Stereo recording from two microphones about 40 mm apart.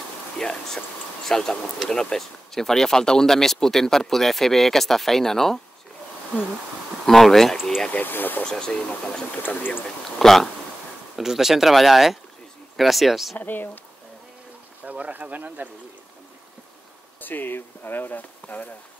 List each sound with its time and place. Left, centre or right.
0.4 s speech: centre
7.1 s speech: centre
7.9 s speech: left
8.5 s speech: centre
11.1 s speech: centre
13.4 s speech: left
14.9 s speech: right
17.2 s speech: left